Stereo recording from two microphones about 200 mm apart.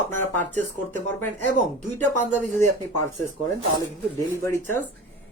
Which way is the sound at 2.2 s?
35° right (ahead or behind).